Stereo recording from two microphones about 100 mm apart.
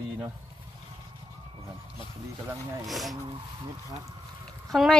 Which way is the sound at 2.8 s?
Centre (ahead or behind).